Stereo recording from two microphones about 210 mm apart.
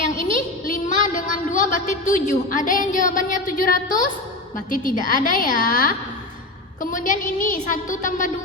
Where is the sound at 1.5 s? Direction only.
40° left (ahead or behind).